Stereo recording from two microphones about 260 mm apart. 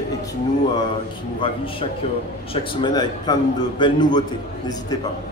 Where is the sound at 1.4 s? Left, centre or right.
Left.